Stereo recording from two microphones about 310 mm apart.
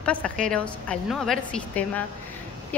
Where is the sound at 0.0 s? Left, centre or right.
Centre.